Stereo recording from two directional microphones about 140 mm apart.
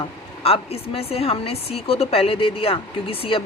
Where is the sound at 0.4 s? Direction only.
45° left (ahead or behind).